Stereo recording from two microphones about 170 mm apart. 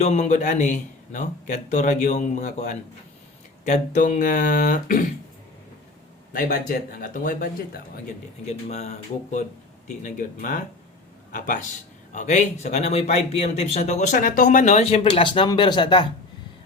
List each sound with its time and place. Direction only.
0.0 s a man's voice: 40° left (ahead or behind)
6.3 s a man's voice: 50° left (ahead or behind)
8.4 s a man's voice: 40° left (ahead or behind)